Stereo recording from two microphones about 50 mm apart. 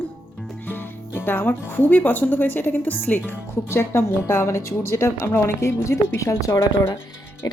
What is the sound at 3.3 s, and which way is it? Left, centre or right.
Speech, left.